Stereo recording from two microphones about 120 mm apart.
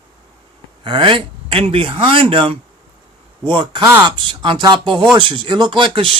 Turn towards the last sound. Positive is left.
turn(degrees=-45)  # may be behind; listen again after turning